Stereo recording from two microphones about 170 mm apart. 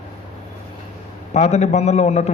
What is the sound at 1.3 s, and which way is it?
Speech, 40° left (ahead or behind).